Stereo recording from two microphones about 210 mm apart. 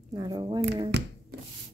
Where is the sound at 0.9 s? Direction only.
55° right (ahead or behind).